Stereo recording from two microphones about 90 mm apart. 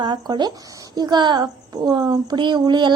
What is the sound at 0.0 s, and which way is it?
A woman's voice, 55° right (ahead or behind).